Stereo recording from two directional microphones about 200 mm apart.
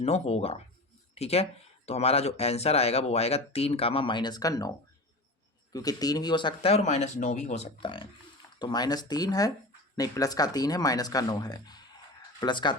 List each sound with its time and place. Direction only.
0.0 s speech: 30° left (ahead or behind)
5.7 s speech: 20° left (ahead or behind)